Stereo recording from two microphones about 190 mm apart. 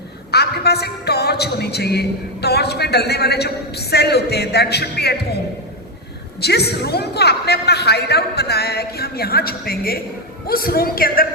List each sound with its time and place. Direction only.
0.3 s a woman's voice: 60° left (ahead or behind)
6.4 s a woman's voice: 60° left (ahead or behind)